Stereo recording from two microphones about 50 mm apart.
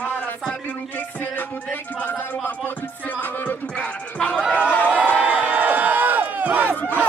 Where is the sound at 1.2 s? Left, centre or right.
Left.